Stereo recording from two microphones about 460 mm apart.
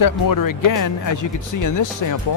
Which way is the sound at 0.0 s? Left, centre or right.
Left.